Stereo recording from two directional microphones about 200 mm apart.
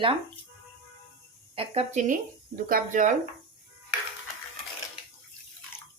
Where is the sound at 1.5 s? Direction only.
30° right (ahead or behind).